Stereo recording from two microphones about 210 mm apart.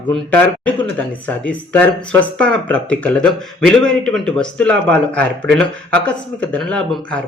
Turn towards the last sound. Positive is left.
turn(degrees=5)  # may be behind; listen again after turning